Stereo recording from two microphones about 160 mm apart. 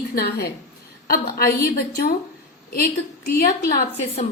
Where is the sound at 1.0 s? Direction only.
70° left (ahead or behind).